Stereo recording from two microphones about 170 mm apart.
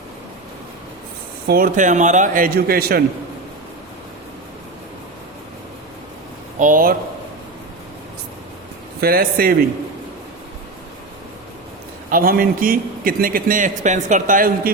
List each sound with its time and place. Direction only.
1.5 s a man's voice: 55° right (ahead or behind)
6.6 s a man's voice: 50° right (ahead or behind)
9.0 s a man's voice: 60° right (ahead or behind)
12.1 s a man's voice: 60° right (ahead or behind)